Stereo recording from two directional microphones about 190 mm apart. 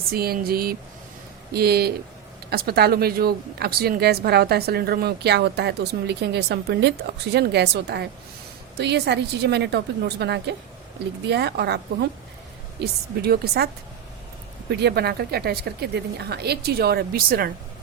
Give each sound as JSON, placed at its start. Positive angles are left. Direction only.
{"t": 0.1, "sound": "speech", "side_deg": -50}
{"t": 14.7, "sound": "speech", "side_deg": -60}